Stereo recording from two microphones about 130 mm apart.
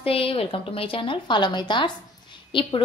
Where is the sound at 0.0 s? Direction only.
45° left (ahead or behind).